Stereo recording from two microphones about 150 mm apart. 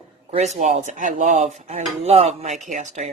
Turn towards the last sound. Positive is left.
turn(degrees=-55)  # may be behind; listen again after turning